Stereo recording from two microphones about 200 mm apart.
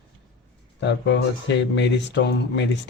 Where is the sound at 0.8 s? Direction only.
65° left (ahead or behind).